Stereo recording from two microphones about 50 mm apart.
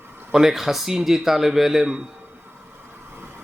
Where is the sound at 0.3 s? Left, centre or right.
Centre.